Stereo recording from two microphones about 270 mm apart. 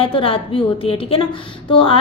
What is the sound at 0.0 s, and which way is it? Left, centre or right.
A woman's voice, centre.